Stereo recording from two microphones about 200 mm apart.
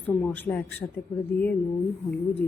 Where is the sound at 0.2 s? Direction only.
5° left (ahead or behind).